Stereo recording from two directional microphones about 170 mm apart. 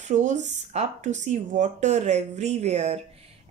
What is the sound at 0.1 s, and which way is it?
A woman's voice, 45° right (ahead or behind).